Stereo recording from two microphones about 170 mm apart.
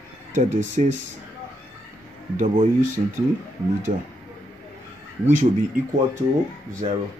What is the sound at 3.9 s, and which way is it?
Speech, 40° right (ahead or behind).